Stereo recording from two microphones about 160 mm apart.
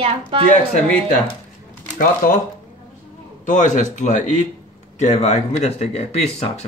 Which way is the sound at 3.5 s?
50° left (ahead or behind).